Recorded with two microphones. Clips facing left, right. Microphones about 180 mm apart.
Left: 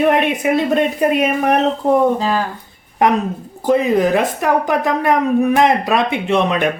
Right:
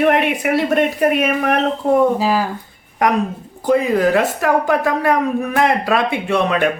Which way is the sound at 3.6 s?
20° left (ahead or behind).